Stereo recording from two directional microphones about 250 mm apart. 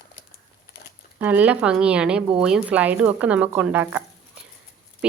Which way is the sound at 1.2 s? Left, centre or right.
Centre.